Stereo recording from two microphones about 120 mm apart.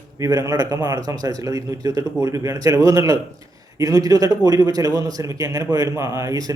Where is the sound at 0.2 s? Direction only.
30° right (ahead or behind).